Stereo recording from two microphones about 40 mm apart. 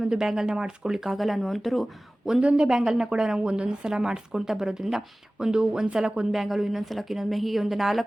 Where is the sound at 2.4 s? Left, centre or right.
Right.